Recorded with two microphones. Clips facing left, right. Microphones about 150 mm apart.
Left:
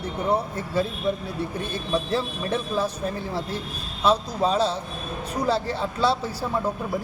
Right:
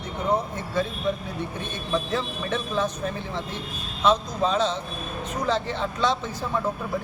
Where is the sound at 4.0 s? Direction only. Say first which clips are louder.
Even; 35° left (ahead or behind).